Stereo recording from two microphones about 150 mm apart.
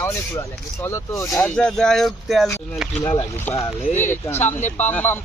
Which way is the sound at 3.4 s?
15° left (ahead or behind).